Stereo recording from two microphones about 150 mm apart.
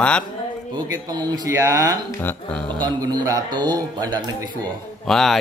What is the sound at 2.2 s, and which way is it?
Speech, 15° left (ahead or behind).